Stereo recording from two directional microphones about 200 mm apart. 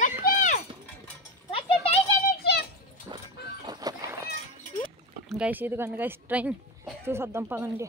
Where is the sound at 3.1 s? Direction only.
25° right (ahead or behind).